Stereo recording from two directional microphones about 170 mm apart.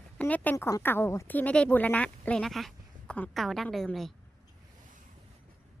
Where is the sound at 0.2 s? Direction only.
10° left (ahead or behind).